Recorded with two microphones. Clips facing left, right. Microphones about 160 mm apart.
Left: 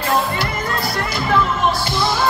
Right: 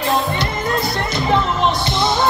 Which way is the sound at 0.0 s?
20° right (ahead or behind).